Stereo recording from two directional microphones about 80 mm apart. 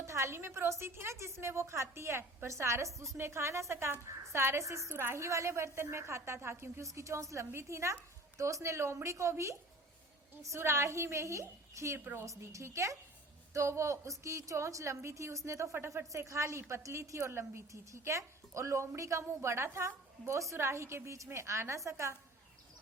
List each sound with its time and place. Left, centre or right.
0.0 s a woman's voice: right
11.9 s a woman's voice: right
12.2 s a woman's voice: right